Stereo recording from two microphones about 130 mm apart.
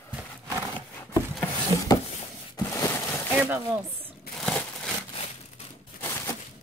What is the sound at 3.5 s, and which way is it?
Speech, 15° right (ahead or behind).